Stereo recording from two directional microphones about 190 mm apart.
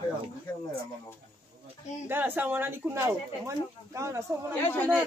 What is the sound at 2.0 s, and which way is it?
Speech, 10° right (ahead or behind).